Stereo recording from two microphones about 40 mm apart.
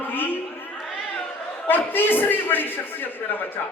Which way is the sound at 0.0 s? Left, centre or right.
Left.